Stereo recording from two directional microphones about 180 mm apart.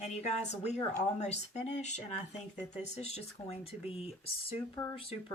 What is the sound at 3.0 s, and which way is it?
Speech, 35° left (ahead or behind).